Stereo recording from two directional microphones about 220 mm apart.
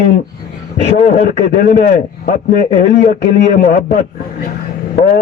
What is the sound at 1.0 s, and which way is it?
A man's voice, 35° left (ahead or behind).